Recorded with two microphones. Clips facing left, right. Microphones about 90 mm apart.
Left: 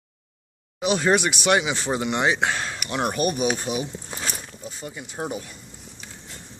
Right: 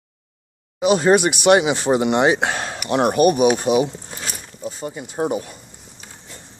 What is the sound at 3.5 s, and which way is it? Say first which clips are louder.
Speech: right 10 dB; 80° right.